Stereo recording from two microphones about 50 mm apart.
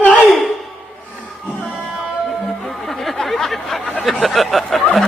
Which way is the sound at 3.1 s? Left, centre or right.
Centre.